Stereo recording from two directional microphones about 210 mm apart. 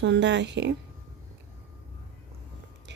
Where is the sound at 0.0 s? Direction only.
55° right (ahead or behind).